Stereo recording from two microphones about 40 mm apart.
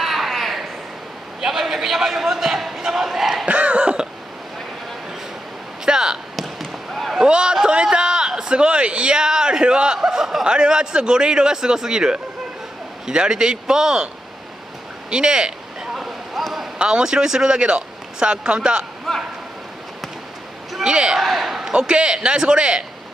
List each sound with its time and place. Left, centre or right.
0.0 s a sound: centre
3.4 s throat clearing: right
5.9 s basketball bounce: centre
6.3 s basketball bounce: centre
7.2 s a sound: right
9.9 s a man's voice: centre
15.0 s a sound: right
16.7 s a man's voice: right
19.1 s a sound: centre
20.8 s a man's voice: right
21.2 s a man's voice: centre
21.7 s a man's voice: right